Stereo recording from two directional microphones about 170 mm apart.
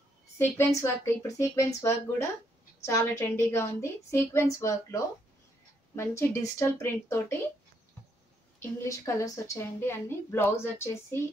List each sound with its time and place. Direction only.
0.4 s a woman's voice: 15° left (ahead or behind)
8.5 s a woman's voice: 15° left (ahead or behind)